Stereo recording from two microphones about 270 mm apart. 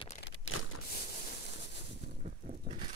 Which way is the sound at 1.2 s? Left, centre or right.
Left.